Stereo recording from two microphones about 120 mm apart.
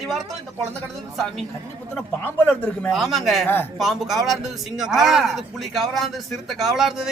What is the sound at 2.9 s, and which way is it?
Speech, centre (ahead or behind).